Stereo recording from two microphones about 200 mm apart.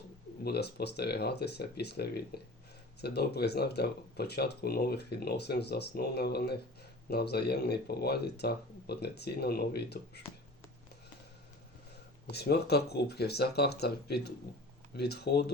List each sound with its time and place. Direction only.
0.4 s speech: 55° left (ahead or behind)
12.3 s speech: 55° left (ahead or behind)